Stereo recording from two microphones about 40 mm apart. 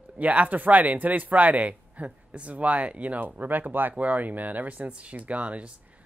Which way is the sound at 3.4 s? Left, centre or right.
Right.